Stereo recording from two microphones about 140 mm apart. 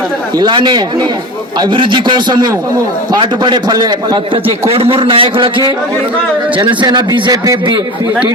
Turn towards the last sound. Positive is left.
turn(degrees=-30)  # may be behind; listen again after turning